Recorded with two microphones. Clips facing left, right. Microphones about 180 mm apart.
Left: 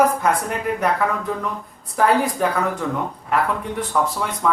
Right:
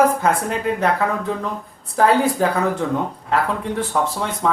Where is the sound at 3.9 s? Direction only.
30° right (ahead or behind).